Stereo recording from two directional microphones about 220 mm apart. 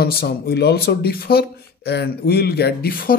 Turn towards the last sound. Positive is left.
turn(degrees=40)  # may be behind; listen again after turning